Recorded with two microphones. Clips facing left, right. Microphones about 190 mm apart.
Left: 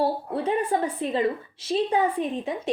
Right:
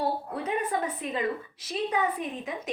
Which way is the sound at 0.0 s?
30° left (ahead or behind).